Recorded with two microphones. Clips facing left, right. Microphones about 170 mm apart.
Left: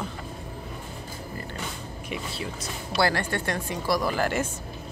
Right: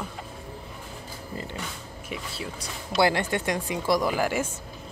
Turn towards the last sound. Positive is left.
turn(degrees=-10)  # may be behind; listen again after turning